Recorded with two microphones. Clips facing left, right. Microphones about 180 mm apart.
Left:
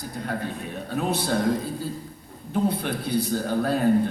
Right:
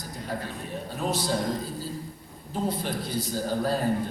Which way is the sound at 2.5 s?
60° left (ahead or behind).